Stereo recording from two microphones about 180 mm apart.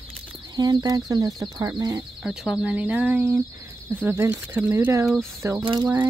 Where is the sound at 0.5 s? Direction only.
20° right (ahead or behind).